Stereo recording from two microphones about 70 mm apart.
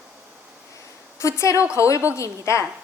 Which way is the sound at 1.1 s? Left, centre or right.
Left.